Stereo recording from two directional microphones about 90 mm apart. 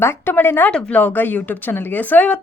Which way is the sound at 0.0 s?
25° left (ahead or behind).